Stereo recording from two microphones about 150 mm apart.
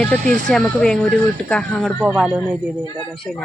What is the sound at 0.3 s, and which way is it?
Speech, 65° right (ahead or behind).